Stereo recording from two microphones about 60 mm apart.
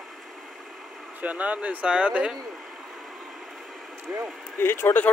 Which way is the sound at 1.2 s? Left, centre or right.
Right.